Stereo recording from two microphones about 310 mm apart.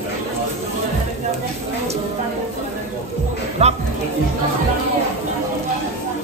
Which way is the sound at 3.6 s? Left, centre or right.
Centre.